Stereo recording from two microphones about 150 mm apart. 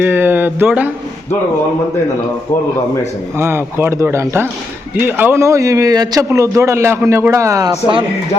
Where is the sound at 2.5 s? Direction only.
20° left (ahead or behind).